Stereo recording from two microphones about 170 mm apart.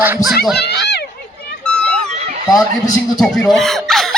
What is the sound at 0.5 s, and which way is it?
Speech, 80° left.